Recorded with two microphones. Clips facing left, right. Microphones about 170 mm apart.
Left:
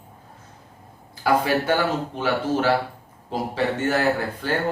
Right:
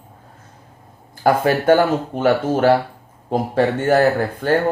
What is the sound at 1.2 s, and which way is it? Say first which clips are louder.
Speech: right 4 dB; 50° right (ahead or behind).